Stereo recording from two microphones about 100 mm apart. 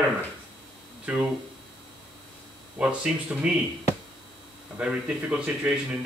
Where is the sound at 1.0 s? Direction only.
15° right (ahead or behind).